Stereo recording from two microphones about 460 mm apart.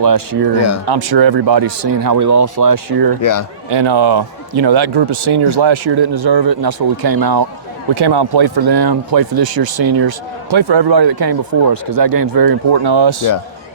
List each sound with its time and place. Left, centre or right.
0.1 s speech: right
3.2 s speech: left
3.7 s speech: right
9.8 s speech: right
10.1 s speech: right